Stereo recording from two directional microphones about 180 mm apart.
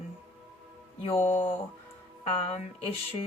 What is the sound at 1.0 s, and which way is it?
Speech, 30° left (ahead or behind).